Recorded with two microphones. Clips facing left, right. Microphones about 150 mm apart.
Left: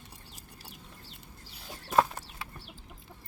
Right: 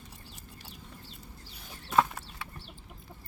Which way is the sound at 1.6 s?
35° left (ahead or behind).